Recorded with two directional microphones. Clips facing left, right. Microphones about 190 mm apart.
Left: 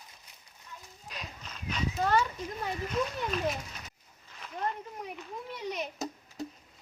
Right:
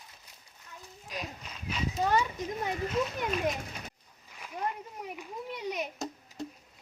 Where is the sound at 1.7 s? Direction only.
15° right (ahead or behind).